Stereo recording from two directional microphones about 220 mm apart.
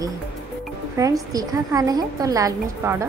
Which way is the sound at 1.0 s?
15° right (ahead or behind).